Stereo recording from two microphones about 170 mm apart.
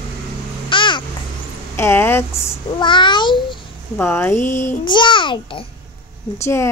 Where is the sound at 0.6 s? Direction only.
30° left (ahead or behind).